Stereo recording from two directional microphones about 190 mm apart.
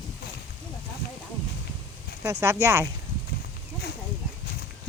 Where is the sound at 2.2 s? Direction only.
15° right (ahead or behind).